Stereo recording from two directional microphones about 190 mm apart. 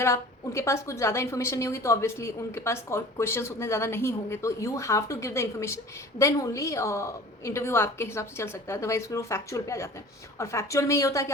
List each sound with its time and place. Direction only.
0.0 s a woman's voice: 15° left (ahead or behind)